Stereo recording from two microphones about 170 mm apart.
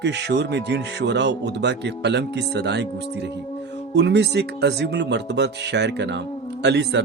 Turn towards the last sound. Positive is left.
turn(degrees=-85)